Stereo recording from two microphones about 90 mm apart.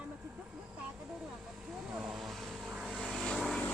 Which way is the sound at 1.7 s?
5° right (ahead or behind).